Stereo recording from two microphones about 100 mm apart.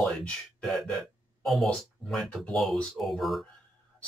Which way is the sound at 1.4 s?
Centre (ahead or behind).